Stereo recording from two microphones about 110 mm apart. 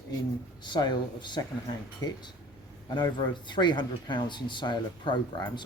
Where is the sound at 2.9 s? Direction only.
45° left (ahead or behind).